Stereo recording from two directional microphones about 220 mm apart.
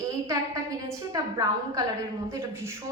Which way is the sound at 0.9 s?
15° right (ahead or behind).